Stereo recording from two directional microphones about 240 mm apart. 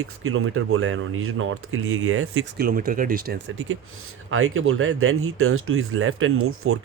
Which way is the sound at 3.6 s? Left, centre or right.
Right.